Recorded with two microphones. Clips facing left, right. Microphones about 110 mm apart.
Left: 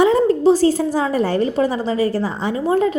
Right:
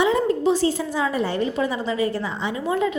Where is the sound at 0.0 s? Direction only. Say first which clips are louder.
Left 6 dB; 40° left (ahead or behind).